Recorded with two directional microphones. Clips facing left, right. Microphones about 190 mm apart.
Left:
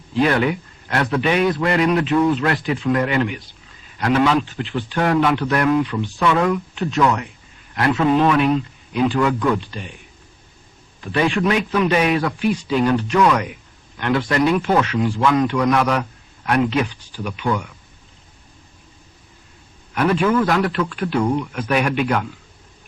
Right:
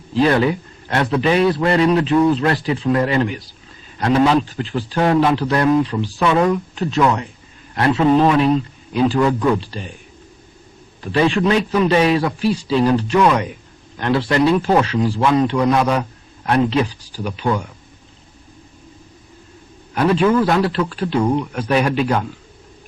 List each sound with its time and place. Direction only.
0.1 s a man's voice: 30° right (ahead or behind)
11.0 s a man's voice: 30° right (ahead or behind)
19.9 s a man's voice: 30° right (ahead or behind)